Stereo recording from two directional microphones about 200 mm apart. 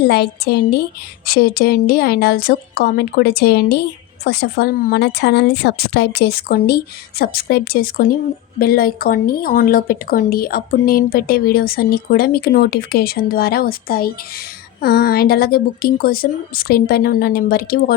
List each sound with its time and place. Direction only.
0.0 s a woman's voice: 55° left (ahead or behind)